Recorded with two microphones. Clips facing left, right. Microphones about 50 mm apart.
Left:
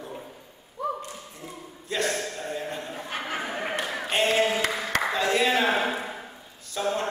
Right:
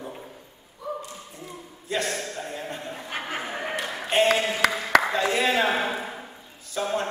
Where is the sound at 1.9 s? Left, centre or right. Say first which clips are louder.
Even; centre.